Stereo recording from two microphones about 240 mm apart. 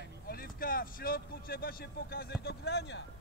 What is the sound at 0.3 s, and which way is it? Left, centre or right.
Speech, left.